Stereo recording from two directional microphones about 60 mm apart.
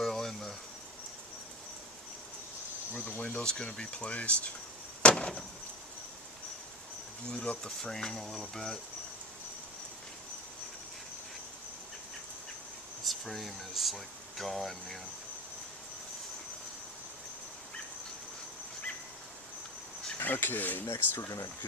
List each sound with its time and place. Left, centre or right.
0.0 s a sound: centre
2.9 s speech: centre
5.0 s a sound: centre
7.3 s speech: centre
13.1 s speech: centre
20.1 s speech: left